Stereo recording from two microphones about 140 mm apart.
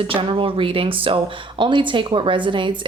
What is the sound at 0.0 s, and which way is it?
Speech, 40° right (ahead or behind).